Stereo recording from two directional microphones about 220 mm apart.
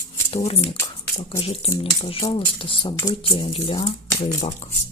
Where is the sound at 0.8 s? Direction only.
10° left (ahead or behind).